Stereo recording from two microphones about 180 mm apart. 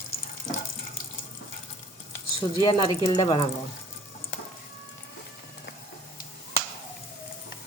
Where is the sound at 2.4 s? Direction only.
25° left (ahead or behind).